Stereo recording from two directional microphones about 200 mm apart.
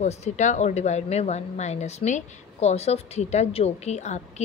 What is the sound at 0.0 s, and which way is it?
Speech, 35° left (ahead or behind).